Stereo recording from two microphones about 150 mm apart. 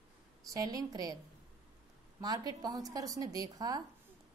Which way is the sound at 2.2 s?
25° right (ahead or behind).